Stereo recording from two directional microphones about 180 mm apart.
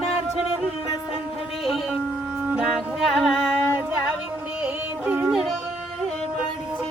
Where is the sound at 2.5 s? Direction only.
Centre (ahead or behind).